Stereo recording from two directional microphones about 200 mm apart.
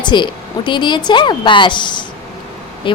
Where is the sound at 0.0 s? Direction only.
25° left (ahead or behind).